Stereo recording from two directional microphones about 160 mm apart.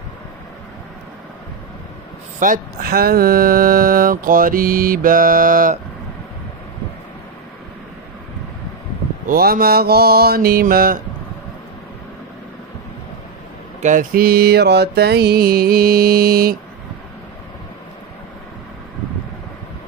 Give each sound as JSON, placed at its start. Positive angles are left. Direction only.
{"t": 2.4, "sound": "speech", "side_deg": -65}
{"t": 9.3, "sound": "mantra", "side_deg": -70}
{"t": 13.7, "sound": "mantra", "side_deg": -55}